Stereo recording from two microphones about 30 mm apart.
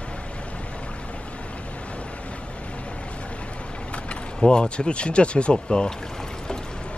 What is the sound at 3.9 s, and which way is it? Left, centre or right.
Speech, left.